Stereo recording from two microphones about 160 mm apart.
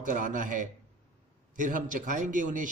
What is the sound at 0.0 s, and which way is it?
A man's voice, 55° right (ahead or behind).